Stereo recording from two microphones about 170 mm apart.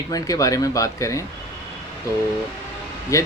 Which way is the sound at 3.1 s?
20° left (ahead or behind).